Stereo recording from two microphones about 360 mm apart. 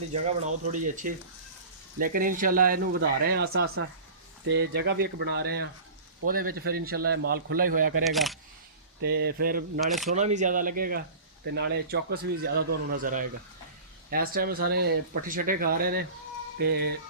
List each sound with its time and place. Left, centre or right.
0.1 s speech: centre
8.0 s speech: centre
9.0 s speech: right
9.8 s speech: centre
10.2 s speech: centre